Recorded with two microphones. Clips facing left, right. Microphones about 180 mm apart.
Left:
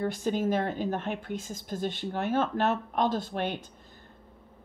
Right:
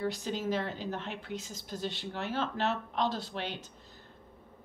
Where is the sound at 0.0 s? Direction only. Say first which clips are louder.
Left 5 dB; 50° left (ahead or behind).